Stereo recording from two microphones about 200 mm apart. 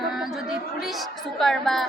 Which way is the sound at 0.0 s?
Centre (ahead or behind).